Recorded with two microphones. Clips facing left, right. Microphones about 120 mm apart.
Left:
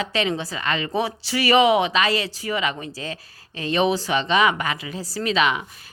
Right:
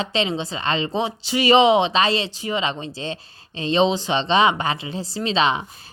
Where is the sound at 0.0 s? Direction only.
25° right (ahead or behind).